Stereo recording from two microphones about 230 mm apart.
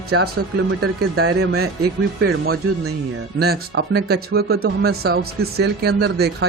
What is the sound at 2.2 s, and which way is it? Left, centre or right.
Speech, right.